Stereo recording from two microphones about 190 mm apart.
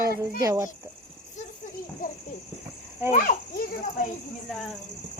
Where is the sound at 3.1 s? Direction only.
45° left (ahead or behind).